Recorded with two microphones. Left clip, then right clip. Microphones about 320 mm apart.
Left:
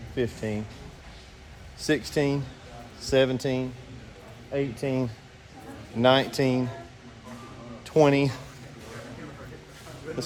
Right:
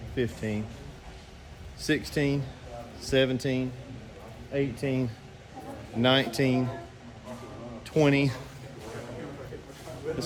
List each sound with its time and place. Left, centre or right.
0.2 s a man's voice: centre
1.8 s a man's voice: centre
7.9 s a man's voice: centre
10.1 s a sound: right